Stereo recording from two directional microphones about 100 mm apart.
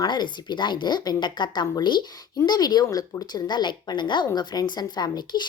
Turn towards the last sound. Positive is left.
turn(degrees=45)  # may be behind; listen again after turning